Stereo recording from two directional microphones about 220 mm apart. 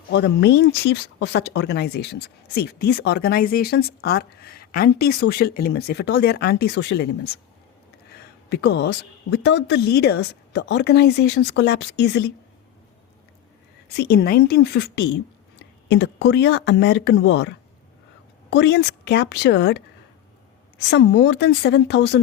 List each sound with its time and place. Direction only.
0.1 s speech: 50° left (ahead or behind)
13.9 s speech: 45° left (ahead or behind)
18.5 s speech: 50° left (ahead or behind)